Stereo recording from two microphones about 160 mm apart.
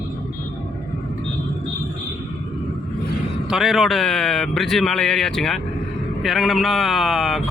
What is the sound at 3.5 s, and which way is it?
Speech, centre (ahead or behind).